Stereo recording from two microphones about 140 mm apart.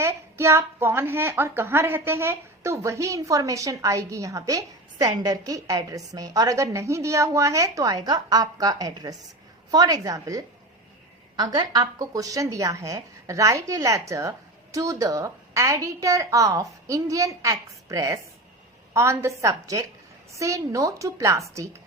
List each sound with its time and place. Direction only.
0.0 s a woman's voice: 20° right (ahead or behind)